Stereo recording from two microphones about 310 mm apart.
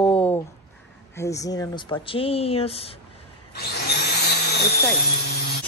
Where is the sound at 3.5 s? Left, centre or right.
Left.